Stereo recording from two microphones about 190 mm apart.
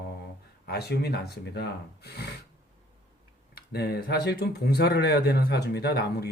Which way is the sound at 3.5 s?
55° left (ahead or behind).